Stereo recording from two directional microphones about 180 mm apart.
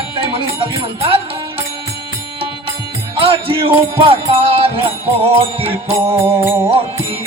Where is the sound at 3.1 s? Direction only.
30° right (ahead or behind).